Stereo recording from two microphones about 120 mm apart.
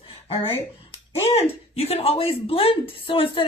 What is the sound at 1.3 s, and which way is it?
A woman's voice, 60° left (ahead or behind).